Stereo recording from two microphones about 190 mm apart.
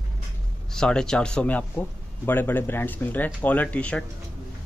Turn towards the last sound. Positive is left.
turn(degrees=5)  # may be behind; listen again after turning